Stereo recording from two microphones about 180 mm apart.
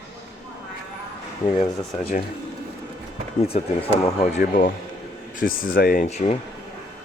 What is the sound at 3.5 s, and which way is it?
Speech, 35° left (ahead or behind).